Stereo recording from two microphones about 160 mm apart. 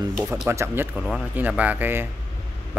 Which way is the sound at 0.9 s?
5° right (ahead or behind).